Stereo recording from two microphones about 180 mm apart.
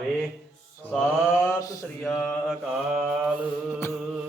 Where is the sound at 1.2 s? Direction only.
15° left (ahead or behind).